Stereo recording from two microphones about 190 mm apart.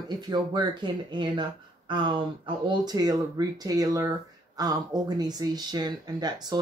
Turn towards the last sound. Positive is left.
turn(degrees=-20)  # may be behind; listen again after turning